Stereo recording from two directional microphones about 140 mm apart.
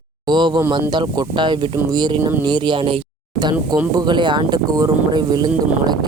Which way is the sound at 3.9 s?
35° right (ahead or behind).